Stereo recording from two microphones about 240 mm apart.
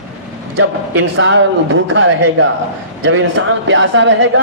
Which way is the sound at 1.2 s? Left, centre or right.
Right.